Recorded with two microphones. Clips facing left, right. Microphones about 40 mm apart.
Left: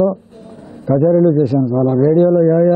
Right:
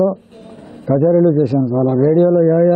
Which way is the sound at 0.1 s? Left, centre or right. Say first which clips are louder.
Even; right.